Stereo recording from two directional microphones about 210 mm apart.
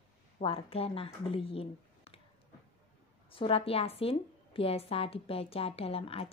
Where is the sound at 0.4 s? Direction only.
25° left (ahead or behind).